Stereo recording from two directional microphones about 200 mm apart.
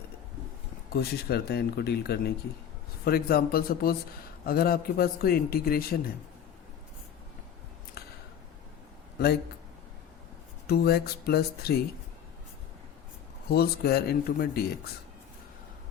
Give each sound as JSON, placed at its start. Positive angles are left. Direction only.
{"t": 0.9, "sound": "a man's voice", "side_deg": 55}
{"t": 9.1, "sound": "a man's voice", "side_deg": 55}
{"t": 10.7, "sound": "a man's voice", "side_deg": 50}
{"t": 13.5, "sound": "a man's voice", "side_deg": 50}